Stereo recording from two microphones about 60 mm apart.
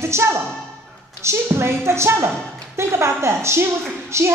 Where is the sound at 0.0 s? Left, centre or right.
Right.